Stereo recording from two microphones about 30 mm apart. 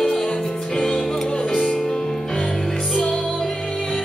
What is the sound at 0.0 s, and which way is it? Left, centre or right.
Music, centre.